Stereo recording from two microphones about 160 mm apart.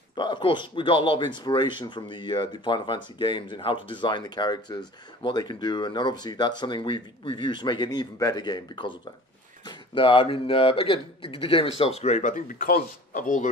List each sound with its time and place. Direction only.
0.1 s speech: 30° left (ahead or behind); by 13.5 s 55° left (ahead or behind)